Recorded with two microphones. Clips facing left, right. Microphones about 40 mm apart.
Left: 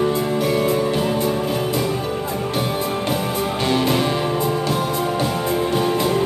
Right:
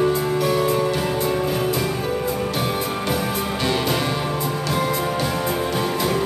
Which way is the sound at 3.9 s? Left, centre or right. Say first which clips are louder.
Left 3 dB; centre.